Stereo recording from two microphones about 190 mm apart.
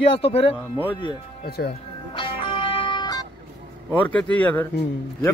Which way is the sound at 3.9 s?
5° left (ahead or behind).